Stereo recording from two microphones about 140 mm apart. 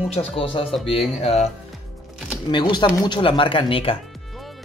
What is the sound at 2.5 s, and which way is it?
Speech, 35° left (ahead or behind).